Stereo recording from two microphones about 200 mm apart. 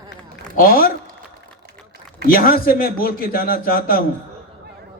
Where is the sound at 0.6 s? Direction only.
45° left (ahead or behind).